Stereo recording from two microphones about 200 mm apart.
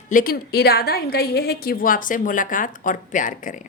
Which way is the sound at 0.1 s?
45° left (ahead or behind).